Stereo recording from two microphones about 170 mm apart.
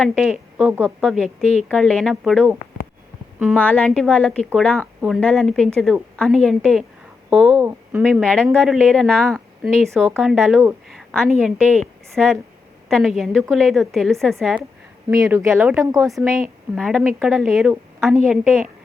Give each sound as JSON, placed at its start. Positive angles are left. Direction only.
{"t": 0.0, "sound": "a woman's voice", "side_deg": 0}
{"t": 1.0, "sound": "a woman's voice", "side_deg": 0}
{"t": 7.6, "sound": "speech", "side_deg": -10}
{"t": 8.0, "sound": "a woman's voice", "side_deg": 0}
{"t": 15.1, "sound": "speech", "side_deg": -15}
{"t": 16.0, "sound": "a woman's voice", "side_deg": 0}